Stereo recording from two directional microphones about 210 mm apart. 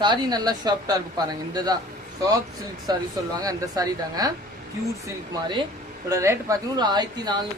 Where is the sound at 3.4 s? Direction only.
15° right (ahead or behind).